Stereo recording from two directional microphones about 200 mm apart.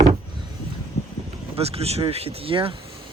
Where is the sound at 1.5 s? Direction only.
30° right (ahead or behind).